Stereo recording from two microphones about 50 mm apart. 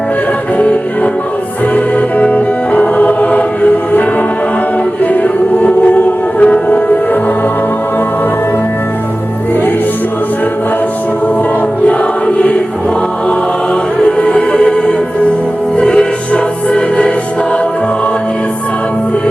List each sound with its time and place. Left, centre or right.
0.5 s music: left
5.0 s music: left
11.9 s choir: left
14.0 s music: left